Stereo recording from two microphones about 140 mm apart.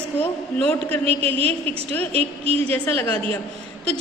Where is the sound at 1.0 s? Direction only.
45° right (ahead or behind).